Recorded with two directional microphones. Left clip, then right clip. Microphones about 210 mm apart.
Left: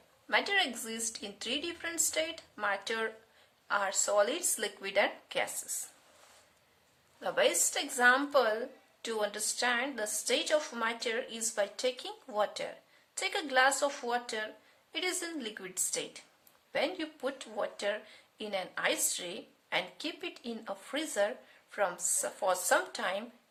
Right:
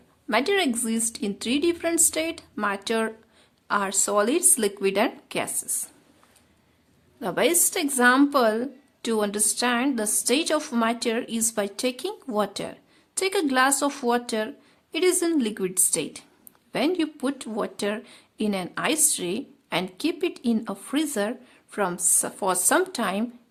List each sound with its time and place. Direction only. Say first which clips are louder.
0.3 s speech: right 7 dB; 35° right (ahead or behind)
7.2 s speech: right 6 dB; 40° right (ahead or behind)